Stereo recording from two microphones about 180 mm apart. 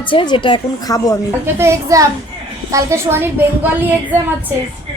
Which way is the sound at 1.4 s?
15° right (ahead or behind).